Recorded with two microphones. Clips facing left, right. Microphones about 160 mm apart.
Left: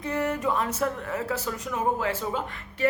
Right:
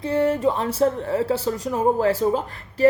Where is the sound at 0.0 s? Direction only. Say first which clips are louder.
Right 7 dB; 30° right (ahead or behind).